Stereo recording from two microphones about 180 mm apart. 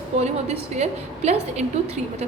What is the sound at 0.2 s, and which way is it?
A woman's voice, 40° right (ahead or behind).